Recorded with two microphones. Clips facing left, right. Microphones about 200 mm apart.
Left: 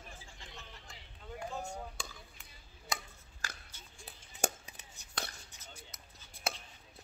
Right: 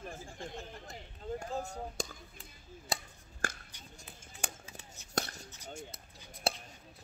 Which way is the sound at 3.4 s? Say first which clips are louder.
Right 8 dB; 55° right (ahead or behind).